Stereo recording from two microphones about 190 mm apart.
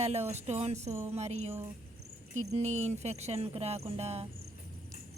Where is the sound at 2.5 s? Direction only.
35° right (ahead or behind).